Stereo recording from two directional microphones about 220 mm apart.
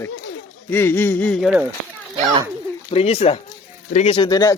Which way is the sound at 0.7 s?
10° left (ahead or behind).